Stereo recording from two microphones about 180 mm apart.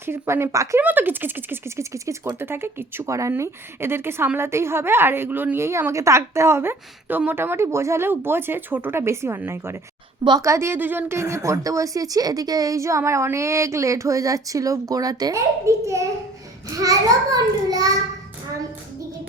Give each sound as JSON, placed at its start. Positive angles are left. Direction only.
{"t": 0.0, "sound": "a child's voice", "side_deg": -15}